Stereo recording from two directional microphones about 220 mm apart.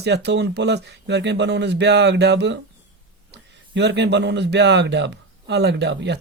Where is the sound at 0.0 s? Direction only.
50° right (ahead or behind).